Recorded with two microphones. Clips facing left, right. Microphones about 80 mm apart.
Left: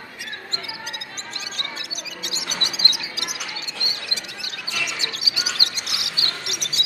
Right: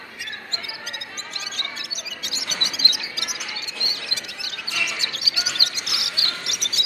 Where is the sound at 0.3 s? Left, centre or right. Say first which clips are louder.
Left 2 dB; left.